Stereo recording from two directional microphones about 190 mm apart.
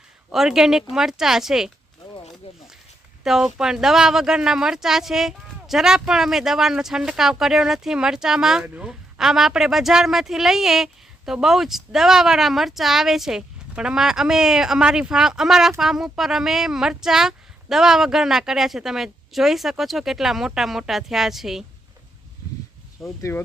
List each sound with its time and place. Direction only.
0.3 s speech: centre (ahead or behind)
3.2 s speech: 5° right (ahead or behind)
23.0 s speech: centre (ahead or behind)